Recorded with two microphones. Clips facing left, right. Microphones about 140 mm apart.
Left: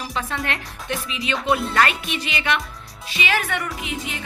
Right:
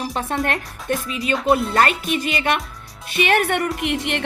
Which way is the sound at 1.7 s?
45° right (ahead or behind).